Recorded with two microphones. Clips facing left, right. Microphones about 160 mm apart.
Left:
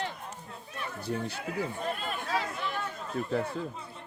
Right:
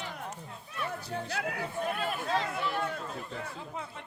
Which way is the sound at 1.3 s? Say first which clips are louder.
Left 1 dB; 65° right (ahead or behind).